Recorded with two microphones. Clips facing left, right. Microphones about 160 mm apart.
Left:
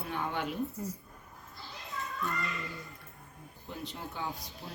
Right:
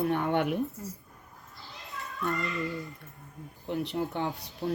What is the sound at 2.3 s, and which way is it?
Speech, 40° right (ahead or behind).